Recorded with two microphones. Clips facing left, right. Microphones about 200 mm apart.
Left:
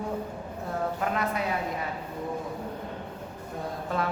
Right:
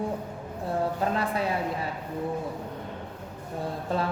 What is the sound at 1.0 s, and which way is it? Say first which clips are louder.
Speech: right 2 dB; 30° right (ahead or behind).